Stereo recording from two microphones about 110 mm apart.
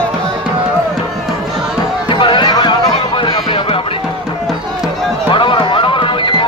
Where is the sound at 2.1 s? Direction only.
50° left (ahead or behind).